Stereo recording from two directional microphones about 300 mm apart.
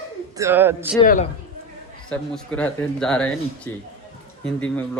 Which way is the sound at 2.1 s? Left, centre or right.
Centre.